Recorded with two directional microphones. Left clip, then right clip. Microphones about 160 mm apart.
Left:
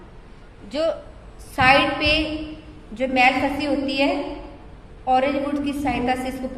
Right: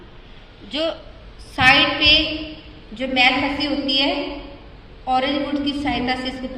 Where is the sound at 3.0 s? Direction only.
40° left (ahead or behind).